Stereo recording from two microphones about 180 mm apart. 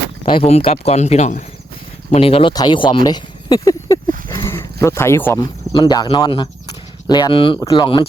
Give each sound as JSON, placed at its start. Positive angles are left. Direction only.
{"t": 0.3, "sound": "speech", "side_deg": 30}
{"t": 4.3, "sound": "dog", "side_deg": 15}
{"t": 5.7, "sound": "speech", "side_deg": 25}